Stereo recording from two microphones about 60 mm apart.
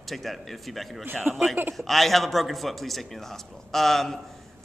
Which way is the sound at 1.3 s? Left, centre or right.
Right.